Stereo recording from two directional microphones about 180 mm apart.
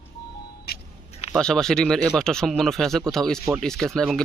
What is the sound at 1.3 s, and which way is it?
Speech, 5° left (ahead or behind).